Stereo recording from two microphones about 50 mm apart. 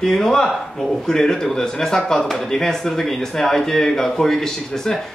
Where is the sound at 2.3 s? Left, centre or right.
Centre.